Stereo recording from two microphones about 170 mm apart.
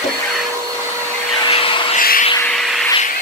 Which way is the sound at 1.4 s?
30° left (ahead or behind).